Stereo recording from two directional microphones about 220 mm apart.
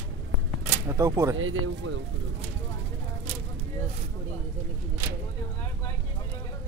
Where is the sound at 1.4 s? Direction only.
65° right (ahead or behind).